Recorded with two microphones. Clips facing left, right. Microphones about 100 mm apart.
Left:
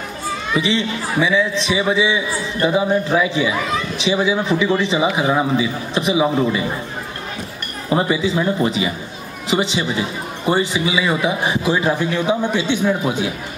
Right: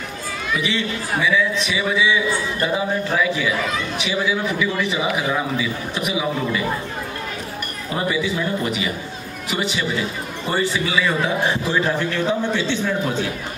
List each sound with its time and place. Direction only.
0.5 s a man's voice: 25° left (ahead or behind)
7.9 s a man's voice: 25° left (ahead or behind)